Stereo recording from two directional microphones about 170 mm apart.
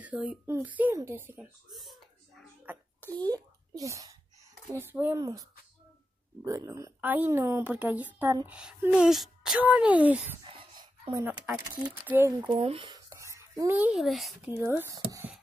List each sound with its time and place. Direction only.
0.0 s a woman's voice: 10° right (ahead or behind)
1.7 s a sound: centre (ahead or behind)
3.0 s a sound: 10° left (ahead or behind)
3.3 s a woman's voice: 20° right (ahead or behind)
10.4 s a sound: 30° right (ahead or behind)
11.6 s speech: 20° right (ahead or behind)
12.0 s a woman's voice: 10° right (ahead or behind)
12.4 s speech: 35° right (ahead or behind)
12.9 s speech: 20° right (ahead or behind); by 14.5 s centre (ahead or behind)
14.8 s a woman's voice: 15° right (ahead or behind)